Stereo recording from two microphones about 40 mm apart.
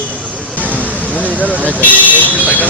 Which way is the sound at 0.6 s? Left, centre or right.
Right.